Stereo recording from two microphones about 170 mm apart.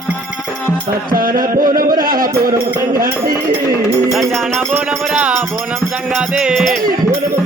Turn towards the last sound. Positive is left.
turn(degrees=0)  # may be behind; listen again after turning